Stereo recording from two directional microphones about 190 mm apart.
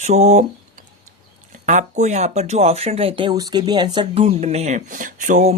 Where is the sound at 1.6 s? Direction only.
40° right (ahead or behind).